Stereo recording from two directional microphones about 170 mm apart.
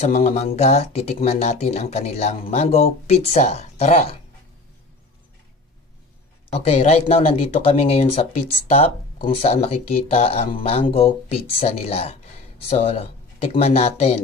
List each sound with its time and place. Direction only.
0.0 s speech: 40° left (ahead or behind)
6.7 s speech: 35° left (ahead or behind)